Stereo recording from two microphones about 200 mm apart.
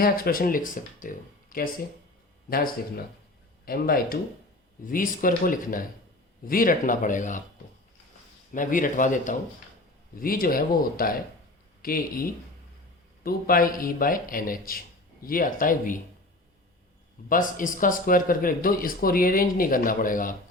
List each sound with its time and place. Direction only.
0.0 s speech: 45° left (ahead or behind)
3.7 s speech: 45° left (ahead or behind)
8.5 s speech: 40° left (ahead or behind)
17.2 s speech: 40° left (ahead or behind)